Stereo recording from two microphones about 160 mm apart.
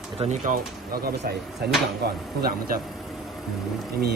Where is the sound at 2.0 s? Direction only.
75° right (ahead or behind).